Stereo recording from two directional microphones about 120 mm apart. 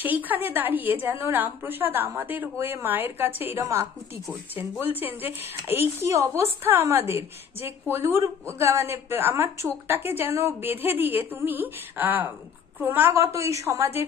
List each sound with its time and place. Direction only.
0.0 s a woman's voice: 15° right (ahead or behind)